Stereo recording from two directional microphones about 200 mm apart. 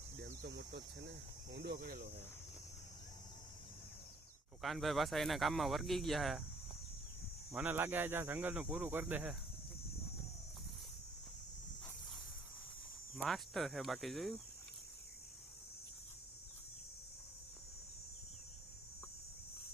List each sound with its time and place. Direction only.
0.2 s a sound: 60° right (ahead or behind)
1.5 s speech: 55° right (ahead or behind)
4.6 s speech: centre (ahead or behind)
7.5 s speech: 10° right (ahead or behind)
13.2 s speech: centre (ahead or behind)